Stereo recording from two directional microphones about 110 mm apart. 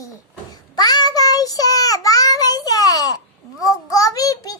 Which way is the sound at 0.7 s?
40° left (ahead or behind).